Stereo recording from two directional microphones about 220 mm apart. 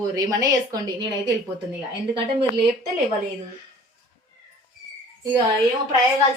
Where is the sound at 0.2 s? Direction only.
15° right (ahead or behind).